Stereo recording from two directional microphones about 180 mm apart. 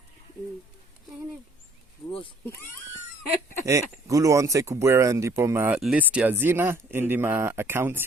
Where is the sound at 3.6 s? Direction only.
15° right (ahead or behind).